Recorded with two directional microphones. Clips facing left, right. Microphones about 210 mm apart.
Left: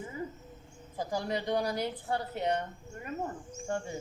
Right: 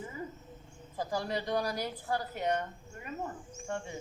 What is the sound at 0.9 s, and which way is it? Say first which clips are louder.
A woman's voice: left 1 dB; 20° left (ahead or behind).